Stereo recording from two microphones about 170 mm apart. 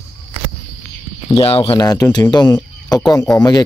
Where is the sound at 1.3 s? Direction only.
35° left (ahead or behind).